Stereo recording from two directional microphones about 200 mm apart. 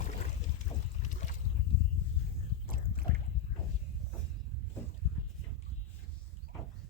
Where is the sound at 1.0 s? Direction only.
35° left (ahead or behind).